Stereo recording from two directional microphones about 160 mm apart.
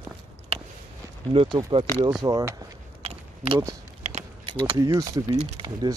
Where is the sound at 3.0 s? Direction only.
35° right (ahead or behind).